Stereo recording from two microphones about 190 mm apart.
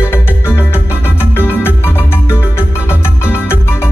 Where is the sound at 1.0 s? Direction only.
10° left (ahead or behind).